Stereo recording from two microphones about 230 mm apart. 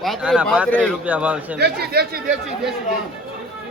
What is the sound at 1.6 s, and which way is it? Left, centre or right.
Speech, right.